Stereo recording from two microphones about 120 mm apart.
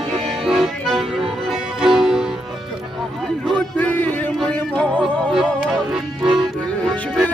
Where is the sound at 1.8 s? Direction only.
5° right (ahead or behind).